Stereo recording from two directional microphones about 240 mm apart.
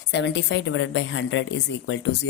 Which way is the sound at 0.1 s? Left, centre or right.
Left.